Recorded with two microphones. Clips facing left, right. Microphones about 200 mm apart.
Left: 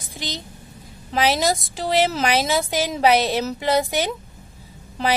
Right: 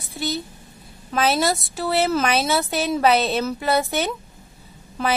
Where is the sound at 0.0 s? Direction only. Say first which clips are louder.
Right 5 dB; 90° left.